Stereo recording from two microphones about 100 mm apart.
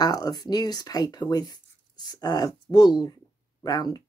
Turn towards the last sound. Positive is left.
turn(degrees=40)  # may be behind; listen again after turning